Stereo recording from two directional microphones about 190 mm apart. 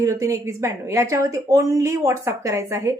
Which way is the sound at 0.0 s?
15° right (ahead or behind).